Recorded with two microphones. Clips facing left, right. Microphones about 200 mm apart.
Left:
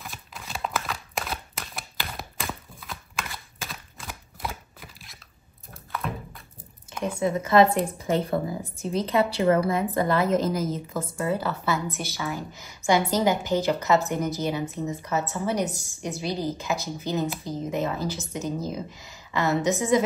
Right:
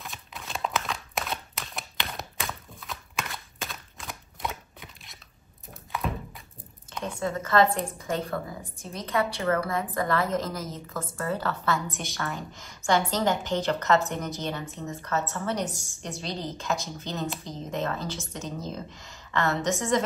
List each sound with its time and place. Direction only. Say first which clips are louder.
0.0 s a sound: even; centre (ahead or behind)
7.2 s a woman's voice: left 4 dB; 15° left (ahead or behind)
8.9 s a woman's voice: left 5 dB; 25° left (ahead or behind); by 20.0 s 10° left (ahead or behind)